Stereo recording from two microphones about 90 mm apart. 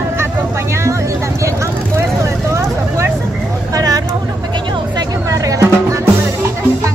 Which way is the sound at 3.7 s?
40° right (ahead or behind).